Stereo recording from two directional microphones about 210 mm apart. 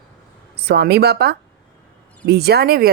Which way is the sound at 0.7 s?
50° right (ahead or behind).